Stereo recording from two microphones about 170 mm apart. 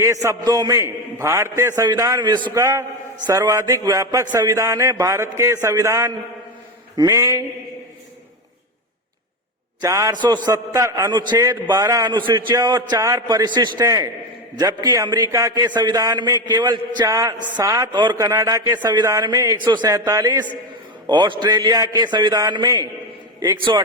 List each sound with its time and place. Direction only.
0.0 s a man's voice: 20° right (ahead or behind)
9.8 s a man's voice: 20° right (ahead or behind)
17.3 s a woman's voice: 50° right (ahead or behind)
17.6 s a man's voice: 20° right (ahead or behind)